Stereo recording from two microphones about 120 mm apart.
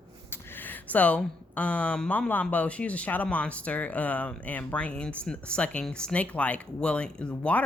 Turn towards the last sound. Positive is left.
turn(degrees=10)  # may be behind; listen again after turning